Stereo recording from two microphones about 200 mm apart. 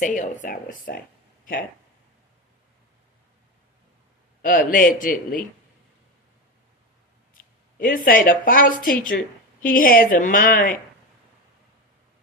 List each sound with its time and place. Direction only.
0.0 s a man's voice: 40° left (ahead or behind)
4.4 s a man's voice: 45° left (ahead or behind)
7.3 s speech: 45° left (ahead or behind)